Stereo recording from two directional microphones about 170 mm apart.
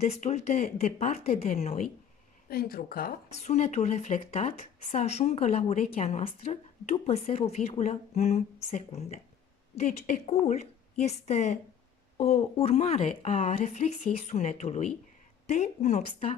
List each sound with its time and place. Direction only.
0.0 s speech: 40° left (ahead or behind)
2.5 s speech: 60° left (ahead or behind)
3.3 s a woman's voice: 40° left (ahead or behind)